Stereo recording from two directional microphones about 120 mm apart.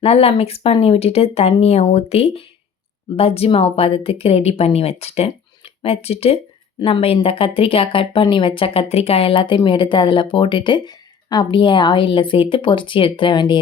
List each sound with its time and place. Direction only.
0.0 s a woman's voice: 55° left (ahead or behind); by 13.6 s 40° left (ahead or behind)